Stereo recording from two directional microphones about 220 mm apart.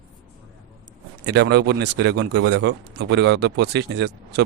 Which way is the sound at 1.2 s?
50° right (ahead or behind).